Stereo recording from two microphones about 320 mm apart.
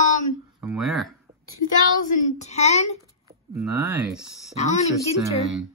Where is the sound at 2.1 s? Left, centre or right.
Left.